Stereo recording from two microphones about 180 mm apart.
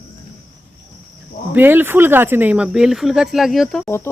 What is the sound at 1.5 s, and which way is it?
Speech, 10° right (ahead or behind).